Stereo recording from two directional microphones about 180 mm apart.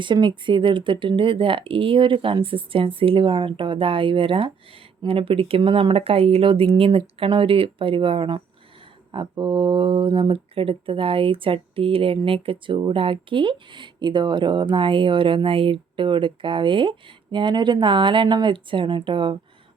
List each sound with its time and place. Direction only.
0.0 s speech: 25° right (ahead or behind)